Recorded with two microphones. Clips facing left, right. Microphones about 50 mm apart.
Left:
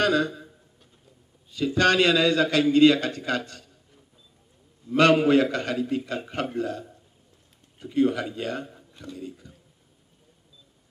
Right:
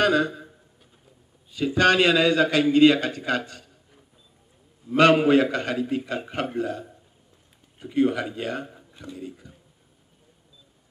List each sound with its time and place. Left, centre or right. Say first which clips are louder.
0.0 s a man's voice: right 2 dB; right